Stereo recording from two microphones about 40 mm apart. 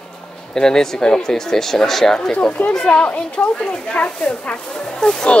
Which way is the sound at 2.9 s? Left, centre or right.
Left.